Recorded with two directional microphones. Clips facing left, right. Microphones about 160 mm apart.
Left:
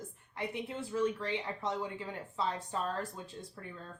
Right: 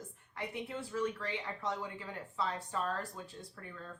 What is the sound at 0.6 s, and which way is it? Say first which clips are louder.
Speech: left 3 dB; 20° left (ahead or behind).